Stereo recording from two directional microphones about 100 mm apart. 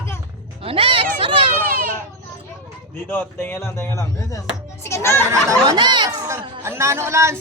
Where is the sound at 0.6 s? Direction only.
70° right (ahead or behind).